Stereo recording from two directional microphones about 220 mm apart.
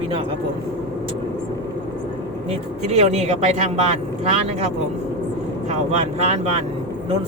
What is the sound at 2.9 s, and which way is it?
Speech, 30° right (ahead or behind).